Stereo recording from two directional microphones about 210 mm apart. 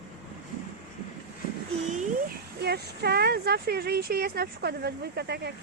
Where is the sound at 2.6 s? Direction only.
50° right (ahead or behind).